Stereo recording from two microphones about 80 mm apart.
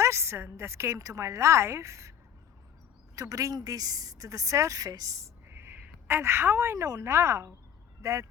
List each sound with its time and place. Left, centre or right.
0.0 s a woman's voice: right
3.2 s a woman's voice: right
5.5 s a woman's voice: right